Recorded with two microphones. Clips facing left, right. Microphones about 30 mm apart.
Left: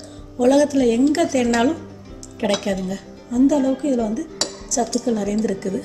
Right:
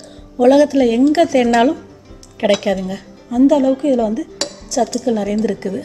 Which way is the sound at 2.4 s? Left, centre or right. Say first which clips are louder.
Right 6 dB; right.